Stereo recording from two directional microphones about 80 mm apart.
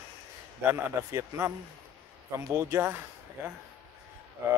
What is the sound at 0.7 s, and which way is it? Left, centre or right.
Speech, right.